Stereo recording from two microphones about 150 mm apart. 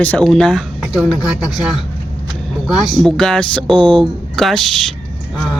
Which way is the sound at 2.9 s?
Centre (ahead or behind).